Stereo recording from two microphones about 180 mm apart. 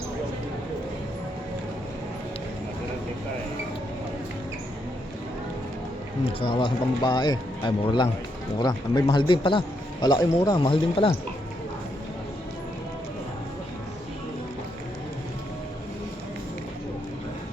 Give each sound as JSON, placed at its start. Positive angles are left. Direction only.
{"t": 6.2, "sound": "a man's voice", "side_deg": 30}